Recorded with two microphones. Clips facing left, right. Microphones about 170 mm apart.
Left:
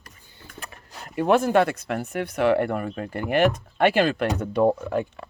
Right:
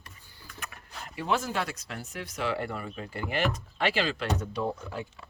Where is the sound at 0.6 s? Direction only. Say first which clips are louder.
Left 2 dB; 35° left (ahead or behind).